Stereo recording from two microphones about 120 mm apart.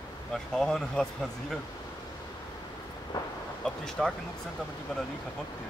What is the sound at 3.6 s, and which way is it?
Speech, 5° left (ahead or behind).